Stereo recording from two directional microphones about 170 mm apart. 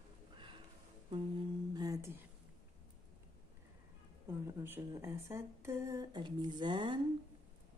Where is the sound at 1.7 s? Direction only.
20° right (ahead or behind).